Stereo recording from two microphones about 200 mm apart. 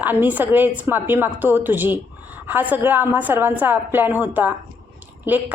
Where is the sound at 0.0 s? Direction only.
10° right (ahead or behind).